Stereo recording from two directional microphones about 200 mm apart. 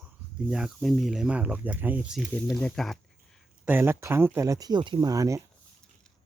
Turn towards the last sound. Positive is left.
turn(degrees=-15)  # may be behind; listen again after turning